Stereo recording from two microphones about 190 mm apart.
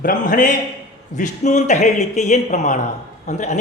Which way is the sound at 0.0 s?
45° left (ahead or behind).